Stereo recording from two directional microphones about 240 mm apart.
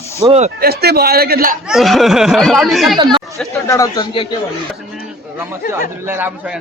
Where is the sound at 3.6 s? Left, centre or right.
Centre.